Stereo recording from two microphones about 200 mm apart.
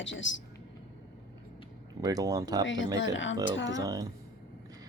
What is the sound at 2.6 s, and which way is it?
A woman's voice, 70° left (ahead or behind).